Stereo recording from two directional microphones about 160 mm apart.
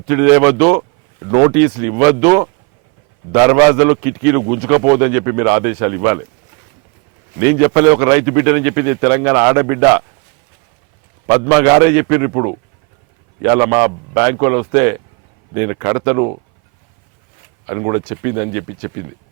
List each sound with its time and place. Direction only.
0.1 s a man's voice: 15° right (ahead or behind)
7.3 s a man's voice: 15° right (ahead or behind)
11.3 s a man's voice: 15° right (ahead or behind)
17.7 s speech: 20° right (ahead or behind)